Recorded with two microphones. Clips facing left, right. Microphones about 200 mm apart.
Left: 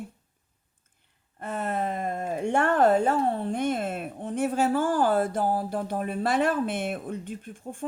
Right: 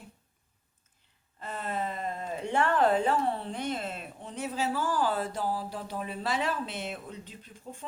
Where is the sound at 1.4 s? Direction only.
50° left (ahead or behind).